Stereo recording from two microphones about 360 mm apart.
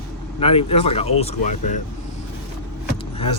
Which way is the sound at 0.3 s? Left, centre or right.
Centre.